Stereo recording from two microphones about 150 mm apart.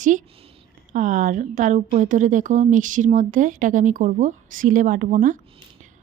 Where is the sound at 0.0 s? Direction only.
60° right (ahead or behind).